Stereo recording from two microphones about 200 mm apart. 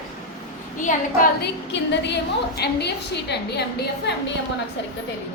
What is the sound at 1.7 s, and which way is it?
A woman's voice, 60° left (ahead or behind).